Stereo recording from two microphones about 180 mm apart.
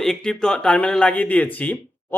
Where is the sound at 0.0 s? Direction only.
5° left (ahead or behind).